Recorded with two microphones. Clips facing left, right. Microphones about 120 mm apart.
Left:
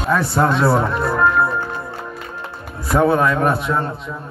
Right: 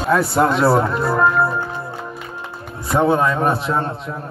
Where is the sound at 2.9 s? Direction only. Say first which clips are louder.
Left 1 dB; 20° right (ahead or behind).